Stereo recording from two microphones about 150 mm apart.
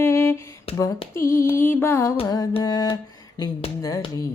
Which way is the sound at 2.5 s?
25° left (ahead or behind).